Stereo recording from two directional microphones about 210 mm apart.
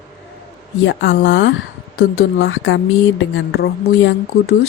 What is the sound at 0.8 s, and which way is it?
A woman's voice, 60° left (ahead or behind).